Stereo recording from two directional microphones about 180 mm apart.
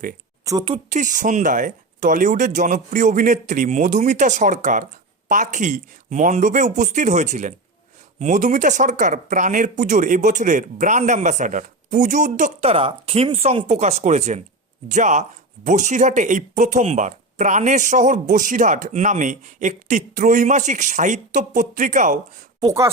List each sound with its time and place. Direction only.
0.4 s speech: 25° right (ahead or behind)
0.9 s speech: 45° right (ahead or behind)
22.6 s speech: 20° right (ahead or behind)